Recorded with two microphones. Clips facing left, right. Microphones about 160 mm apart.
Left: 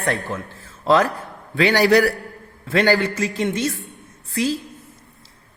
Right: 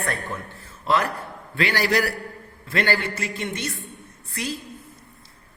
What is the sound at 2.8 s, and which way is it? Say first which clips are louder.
A man's voice: left 7 dB; 90° left.